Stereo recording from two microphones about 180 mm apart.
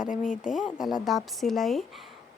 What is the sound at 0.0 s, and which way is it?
Speech, 45° left (ahead or behind).